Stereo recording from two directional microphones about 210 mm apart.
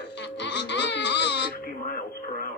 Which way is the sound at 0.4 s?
55° left (ahead or behind).